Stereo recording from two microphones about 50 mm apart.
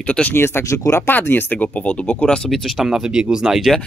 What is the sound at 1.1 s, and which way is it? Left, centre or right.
Speech, left.